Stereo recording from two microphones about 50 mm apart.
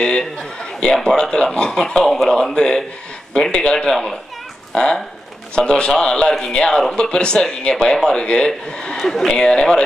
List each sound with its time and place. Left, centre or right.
0.0 s speech: centre
8.9 s speech: centre